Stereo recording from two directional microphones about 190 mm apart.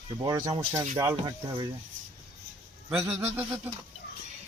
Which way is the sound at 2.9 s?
15° right (ahead or behind).